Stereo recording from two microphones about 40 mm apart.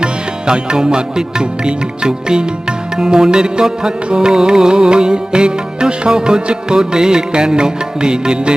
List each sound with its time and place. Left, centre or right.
0.0 s music: right